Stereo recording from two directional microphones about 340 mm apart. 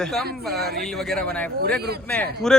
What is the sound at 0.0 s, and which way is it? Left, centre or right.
A woman's voice, centre.